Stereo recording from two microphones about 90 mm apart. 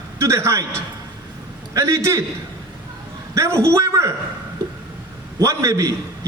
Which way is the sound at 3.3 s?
30° right (ahead or behind).